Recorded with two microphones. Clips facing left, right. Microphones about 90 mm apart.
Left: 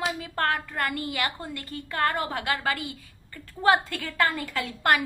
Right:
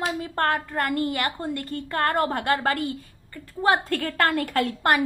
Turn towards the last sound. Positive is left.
turn(degrees=-55)  # may be behind; listen again after turning